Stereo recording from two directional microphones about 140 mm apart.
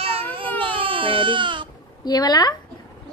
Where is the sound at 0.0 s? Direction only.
45° right (ahead or behind).